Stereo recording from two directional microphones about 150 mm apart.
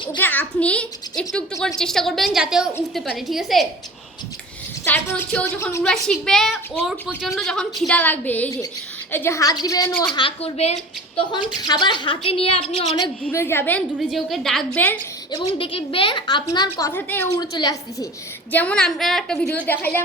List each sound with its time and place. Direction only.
0.2 s a woman's voice: 10° left (ahead or behind)
4.9 s a woman's voice: 10° left (ahead or behind)
10.2 s a woman's voice: 40° left (ahead or behind)
11.3 s a woman's voice: 30° left (ahead or behind)
13.2 s a woman's voice: 15° left (ahead or behind)
14.1 s a woman's voice: centre (ahead or behind)
15.3 s a woman's voice: 35° left (ahead or behind)
16.9 s a woman's voice: 15° left (ahead or behind)
17.4 s a woman's voice: 25° left (ahead or behind)
18.5 s a woman's voice: 10° left (ahead or behind)